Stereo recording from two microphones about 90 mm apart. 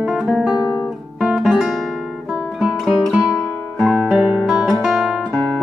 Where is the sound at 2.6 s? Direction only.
10° right (ahead or behind).